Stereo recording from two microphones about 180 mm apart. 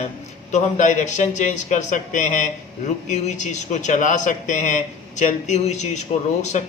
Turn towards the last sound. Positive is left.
turn(degrees=40)  # may be behind; listen again after turning